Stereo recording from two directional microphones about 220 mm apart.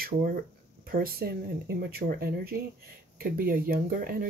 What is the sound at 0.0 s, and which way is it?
Speech, 40° right (ahead or behind).